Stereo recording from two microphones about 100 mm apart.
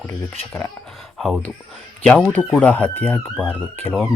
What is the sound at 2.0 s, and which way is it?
Speech, 10° left (ahead or behind).